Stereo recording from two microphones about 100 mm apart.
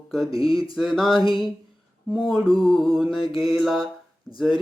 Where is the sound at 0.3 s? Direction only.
65° left (ahead or behind).